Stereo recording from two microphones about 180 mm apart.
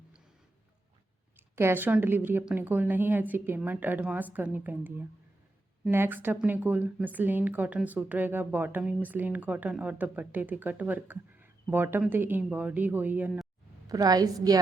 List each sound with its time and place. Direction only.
1.5 s a woman's voice: 10° right (ahead or behind)
13.8 s a woman's voice: 20° right (ahead or behind)